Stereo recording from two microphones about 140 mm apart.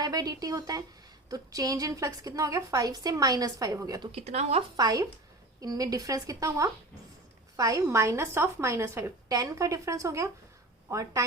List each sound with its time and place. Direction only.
0.0 s a woman's voice: 25° right (ahead or behind)
4.1 s speech: 50° right (ahead or behind)
4.8 s a woman's voice: 25° right (ahead or behind)